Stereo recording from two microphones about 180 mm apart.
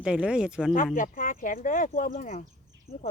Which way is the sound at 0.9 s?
50° left (ahead or behind).